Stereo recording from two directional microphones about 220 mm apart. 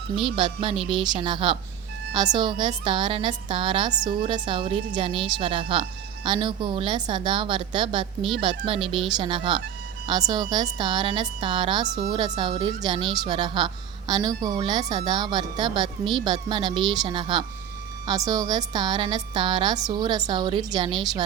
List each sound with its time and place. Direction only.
0.2 s a woman's voice: 25° right (ahead or behind)